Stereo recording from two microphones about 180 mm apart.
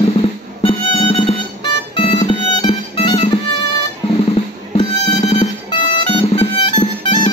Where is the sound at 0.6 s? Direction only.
30° left (ahead or behind).